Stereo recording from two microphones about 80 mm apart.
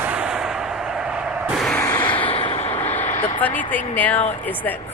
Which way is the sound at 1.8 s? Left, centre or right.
Left.